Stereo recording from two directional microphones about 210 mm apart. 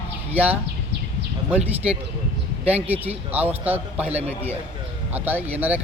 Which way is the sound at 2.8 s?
10° right (ahead or behind).